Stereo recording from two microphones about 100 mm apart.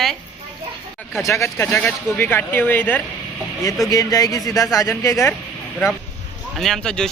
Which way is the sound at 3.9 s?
35° left (ahead or behind).